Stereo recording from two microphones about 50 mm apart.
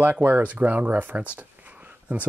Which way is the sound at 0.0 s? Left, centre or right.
Right.